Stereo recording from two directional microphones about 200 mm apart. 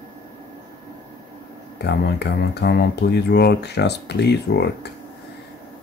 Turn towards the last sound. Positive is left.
turn(degrees=55)  # may be behind; listen again after turning